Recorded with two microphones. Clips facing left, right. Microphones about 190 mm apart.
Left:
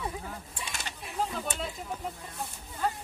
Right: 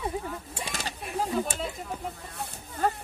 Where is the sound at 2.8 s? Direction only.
50° right (ahead or behind).